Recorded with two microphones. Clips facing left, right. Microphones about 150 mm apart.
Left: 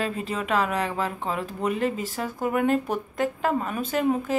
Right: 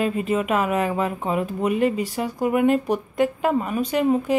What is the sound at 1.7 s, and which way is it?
Speech, 40° left (ahead or behind).